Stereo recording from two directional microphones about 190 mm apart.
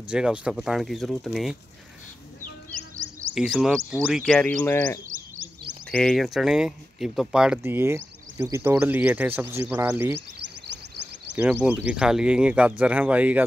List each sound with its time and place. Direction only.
0.1 s speech: 5° right (ahead or behind)
3.0 s music: 90° right
3.3 s speech: centre (ahead or behind)
11.3 s speech: 5° right (ahead or behind)